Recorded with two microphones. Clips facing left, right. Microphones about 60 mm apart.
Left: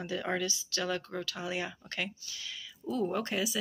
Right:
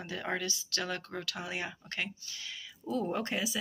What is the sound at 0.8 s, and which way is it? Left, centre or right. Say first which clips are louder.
Speech: left 4 dB; right.